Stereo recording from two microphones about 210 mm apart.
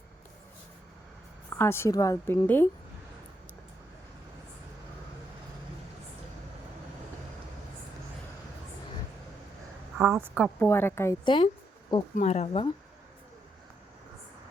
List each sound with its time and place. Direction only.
1.5 s a woman's voice: 10° left (ahead or behind)
10.0 s a woman's voice: 10° right (ahead or behind)
10.4 s a woman's voice: 10° left (ahead or behind)
12.1 s speech: 30° left (ahead or behind)